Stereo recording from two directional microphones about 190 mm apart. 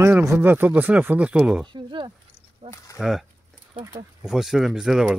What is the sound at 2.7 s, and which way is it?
Speech, 15° left (ahead or behind).